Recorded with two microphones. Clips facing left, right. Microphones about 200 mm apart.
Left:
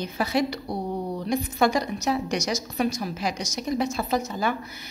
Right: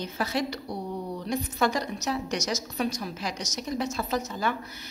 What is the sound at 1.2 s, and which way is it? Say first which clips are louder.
A woman's voice: left 4 dB; 10° left (ahead or behind).